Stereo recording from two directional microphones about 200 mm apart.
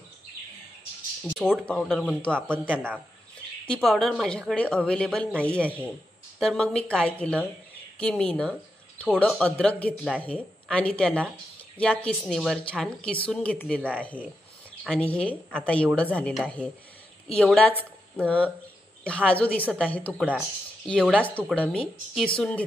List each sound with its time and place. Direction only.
1.2 s a woman's voice: 5° right (ahead or behind)
3.6 s a woman's voice: 5° left (ahead or behind)
13.7 s speech: 10° right (ahead or behind)
15.1 s a woman's voice: 5° left (ahead or behind)